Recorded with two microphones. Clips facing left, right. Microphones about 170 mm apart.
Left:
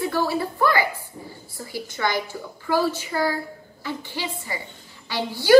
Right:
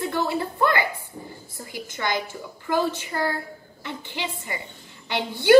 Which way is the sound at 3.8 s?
20° right (ahead or behind).